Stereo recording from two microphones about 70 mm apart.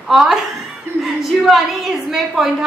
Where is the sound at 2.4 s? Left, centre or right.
Centre.